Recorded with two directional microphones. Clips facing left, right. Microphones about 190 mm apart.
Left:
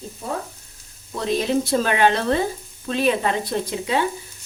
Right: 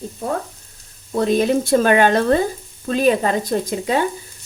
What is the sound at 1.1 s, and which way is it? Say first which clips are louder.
Speech: right 5 dB; 50° right (ahead or behind).